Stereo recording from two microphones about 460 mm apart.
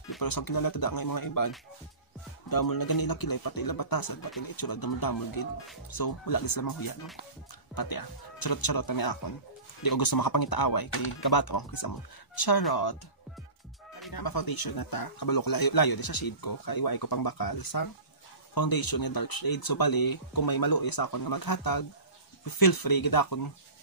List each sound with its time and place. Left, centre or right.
0.2 s speech: left
2.5 s speech: left
14.1 s speech: left